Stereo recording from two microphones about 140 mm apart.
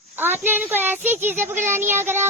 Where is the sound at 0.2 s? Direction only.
15° right (ahead or behind).